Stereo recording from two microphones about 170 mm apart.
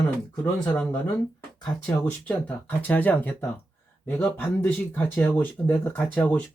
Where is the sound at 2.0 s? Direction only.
10° left (ahead or behind).